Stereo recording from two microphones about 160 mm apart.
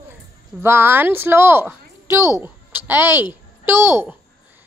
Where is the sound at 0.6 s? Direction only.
15° right (ahead or behind).